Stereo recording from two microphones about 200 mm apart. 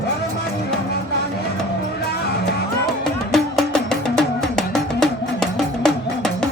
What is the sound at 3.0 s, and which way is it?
Music, centre (ahead or behind).